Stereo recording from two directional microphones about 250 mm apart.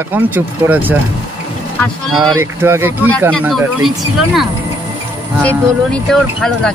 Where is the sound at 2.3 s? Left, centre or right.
Centre.